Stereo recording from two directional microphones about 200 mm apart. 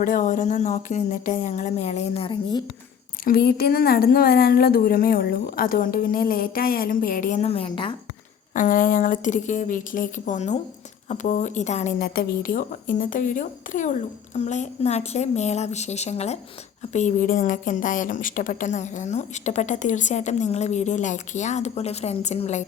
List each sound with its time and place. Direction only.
0.0 s a woman's voice: 40° left (ahead or behind); by 2.6 s 20° left (ahead or behind)
3.2 s speech: 50° left (ahead or behind); by 7.9 s 25° left (ahead or behind)
8.5 s a woman's voice: 40° left (ahead or behind)